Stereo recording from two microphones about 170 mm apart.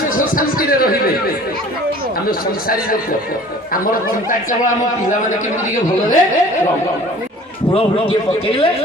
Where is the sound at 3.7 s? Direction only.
55° left (ahead or behind).